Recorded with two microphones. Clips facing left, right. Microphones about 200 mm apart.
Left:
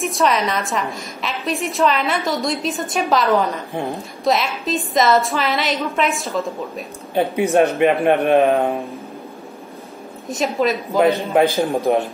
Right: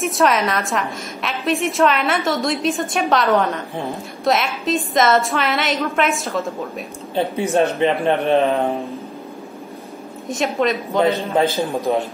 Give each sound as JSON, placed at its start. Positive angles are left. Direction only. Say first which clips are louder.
{"t": 0.0, "sound": "a woman's voice", "louder": "right 1 dB", "side_deg": 0}
{"t": 7.5, "sound": "a man's voice", "louder": "left 2 dB", "side_deg": 15}
{"t": 10.2, "sound": "a woman's voice", "louder": "even", "side_deg": 0}
{"t": 11.3, "sound": "a man's voice", "louder": "left 2 dB", "side_deg": 15}